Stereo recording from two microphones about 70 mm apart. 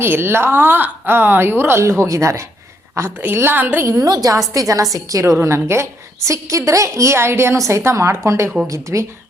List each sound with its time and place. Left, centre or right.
0.0 s a woman's voice: right
3.2 s a woman's voice: right
4.0 s a woman's voice: right